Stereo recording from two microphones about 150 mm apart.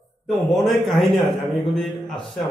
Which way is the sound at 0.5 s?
Centre (ahead or behind).